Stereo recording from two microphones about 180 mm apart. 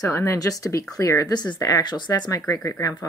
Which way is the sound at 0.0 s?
15° left (ahead or behind).